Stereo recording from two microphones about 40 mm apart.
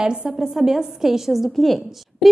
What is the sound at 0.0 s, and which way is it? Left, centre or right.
Speech, right.